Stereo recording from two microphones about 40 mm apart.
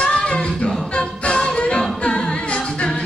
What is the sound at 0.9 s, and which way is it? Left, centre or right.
Music, left.